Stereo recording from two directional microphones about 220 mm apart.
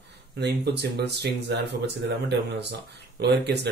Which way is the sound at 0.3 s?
50° right (ahead or behind).